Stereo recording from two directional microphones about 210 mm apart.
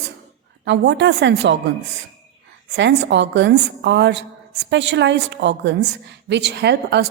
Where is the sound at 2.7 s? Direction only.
55° right (ahead or behind).